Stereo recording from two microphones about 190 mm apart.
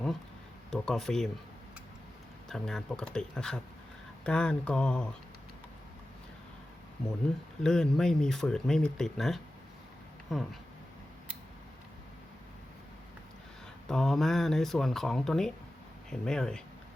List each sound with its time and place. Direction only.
0.7 s speech: centre (ahead or behind)
2.5 s speech: 5° left (ahead or behind)
7.6 s speech: 5° left (ahead or behind)
13.8 s speech: centre (ahead or behind)